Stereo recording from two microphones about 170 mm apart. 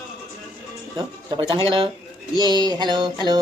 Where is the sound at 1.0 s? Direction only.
30° right (ahead or behind).